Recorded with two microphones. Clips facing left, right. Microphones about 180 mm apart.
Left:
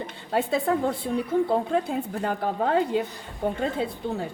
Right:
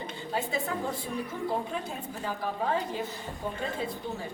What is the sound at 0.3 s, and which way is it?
A woman's voice, 60° left (ahead or behind).